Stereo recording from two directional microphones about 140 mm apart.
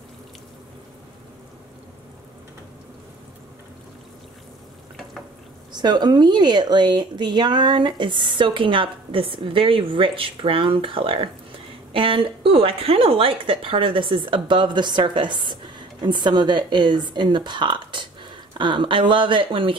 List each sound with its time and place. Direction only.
5.7 s a woman's voice: 30° right (ahead or behind)